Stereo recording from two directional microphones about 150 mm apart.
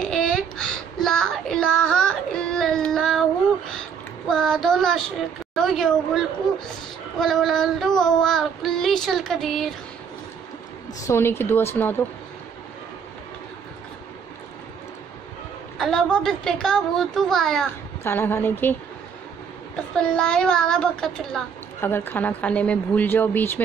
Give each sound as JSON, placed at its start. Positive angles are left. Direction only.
{"t": 0.0, "sound": "a sound", "side_deg": 5}
{"t": 4.3, "sound": "child singing", "side_deg": 5}
{"t": 5.5, "sound": "a sound", "side_deg": 0}
{"t": 7.2, "sound": "child singing", "side_deg": 0}
{"t": 11.1, "sound": "a woman's voice", "side_deg": 15}
{"t": 15.8, "sound": "child singing", "side_deg": 5}
{"t": 18.0, "sound": "a woman's voice", "side_deg": 15}
{"t": 19.7, "sound": "child singing", "side_deg": 5}
{"t": 21.8, "sound": "a woman's voice", "side_deg": 15}